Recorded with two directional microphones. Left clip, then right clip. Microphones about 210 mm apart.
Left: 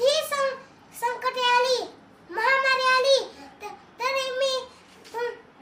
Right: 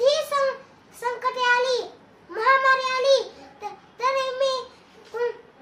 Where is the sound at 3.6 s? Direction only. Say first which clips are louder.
Right 3 dB; 15° right (ahead or behind).